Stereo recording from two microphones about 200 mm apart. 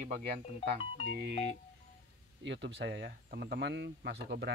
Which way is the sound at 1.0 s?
60° right (ahead or behind).